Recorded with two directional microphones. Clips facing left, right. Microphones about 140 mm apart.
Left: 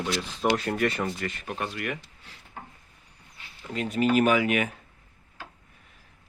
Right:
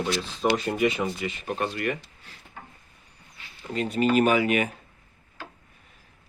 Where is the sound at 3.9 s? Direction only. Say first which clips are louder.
Right 1 dB; 5° left (ahead or behind).